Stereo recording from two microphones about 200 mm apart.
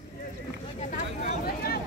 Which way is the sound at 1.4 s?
50° left (ahead or behind).